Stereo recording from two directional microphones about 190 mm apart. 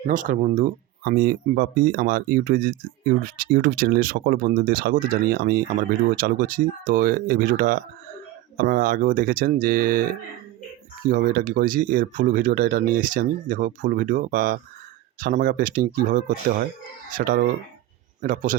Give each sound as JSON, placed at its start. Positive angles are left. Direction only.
{"t": 0.0, "sound": "speech", "side_deg": -45}